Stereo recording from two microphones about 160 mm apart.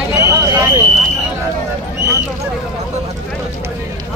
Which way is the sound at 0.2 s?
20° right (ahead or behind).